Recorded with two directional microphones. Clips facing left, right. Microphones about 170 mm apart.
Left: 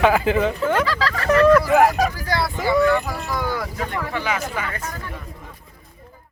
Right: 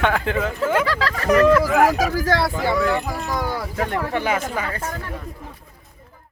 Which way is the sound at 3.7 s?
50° right (ahead or behind).